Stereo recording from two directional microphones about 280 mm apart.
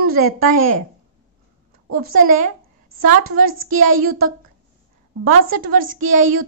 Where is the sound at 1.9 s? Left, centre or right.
Right.